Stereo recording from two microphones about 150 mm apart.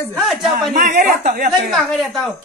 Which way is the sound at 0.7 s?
65° right (ahead or behind).